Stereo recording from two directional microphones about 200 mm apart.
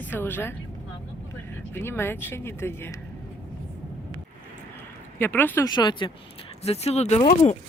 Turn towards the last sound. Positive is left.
turn(degrees=35)  # may be behind; listen again after turning